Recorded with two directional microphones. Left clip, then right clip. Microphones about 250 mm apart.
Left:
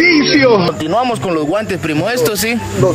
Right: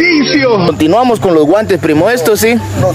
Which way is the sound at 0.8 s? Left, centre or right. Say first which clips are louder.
Right 6 dB; right.